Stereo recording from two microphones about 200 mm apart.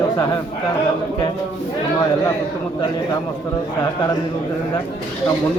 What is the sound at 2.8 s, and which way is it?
Speech, 15° left (ahead or behind).